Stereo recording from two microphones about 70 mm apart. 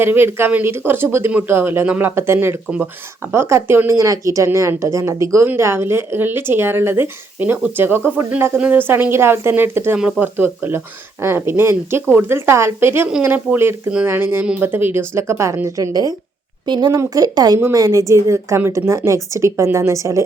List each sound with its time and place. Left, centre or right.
0.0 s speech: right
3.8 s a woman's voice: right
10.0 s speech: centre
10.3 s speech: right
15.9 s speech: right
16.6 s a woman's voice: right
17.0 s speech: right
17.7 s a woman's voice: right